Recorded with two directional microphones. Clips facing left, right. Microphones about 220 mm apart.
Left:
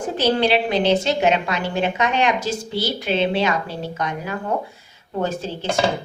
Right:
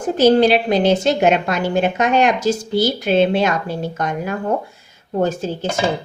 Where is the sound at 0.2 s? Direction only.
45° right (ahead or behind).